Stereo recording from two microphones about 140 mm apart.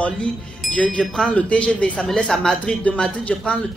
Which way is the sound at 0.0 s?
10° left (ahead or behind).